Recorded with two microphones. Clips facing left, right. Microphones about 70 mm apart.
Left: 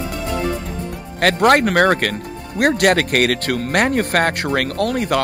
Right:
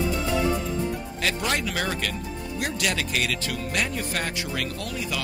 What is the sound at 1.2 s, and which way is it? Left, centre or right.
Speech, left.